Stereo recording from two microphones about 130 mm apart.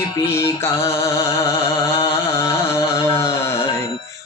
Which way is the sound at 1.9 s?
20° left (ahead or behind).